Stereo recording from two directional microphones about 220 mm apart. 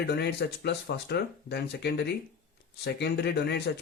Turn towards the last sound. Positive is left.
turn(degrees=50)  # may be behind; listen again after turning